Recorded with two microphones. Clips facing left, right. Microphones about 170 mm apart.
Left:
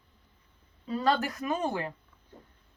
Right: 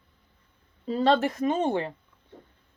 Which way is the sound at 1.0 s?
25° right (ahead or behind).